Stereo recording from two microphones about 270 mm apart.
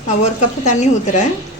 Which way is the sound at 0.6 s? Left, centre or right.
Left.